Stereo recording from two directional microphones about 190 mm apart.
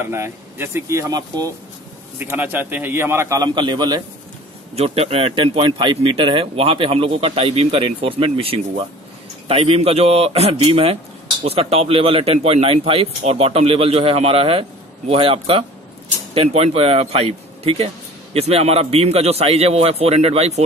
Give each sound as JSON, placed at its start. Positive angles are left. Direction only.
{"t": 0.0, "sound": "a man's voice", "side_deg": -10}